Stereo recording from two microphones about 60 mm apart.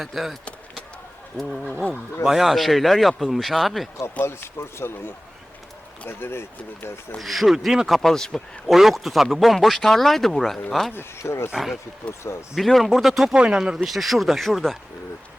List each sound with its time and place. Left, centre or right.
0.0 s speech: centre
1.4 s speech: centre
4.3 s speech: left
7.2 s speech: centre
10.9 s speech: left
11.5 s speech: centre
13.3 s speech: centre